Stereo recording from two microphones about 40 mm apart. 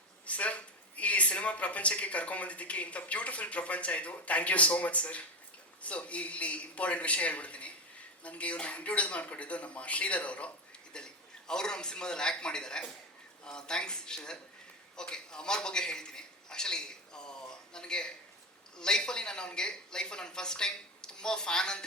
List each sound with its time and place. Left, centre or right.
0.3 s speech: left
10.9 s a man's voice: centre
14.9 s a sound: centre
18.8 s speech: centre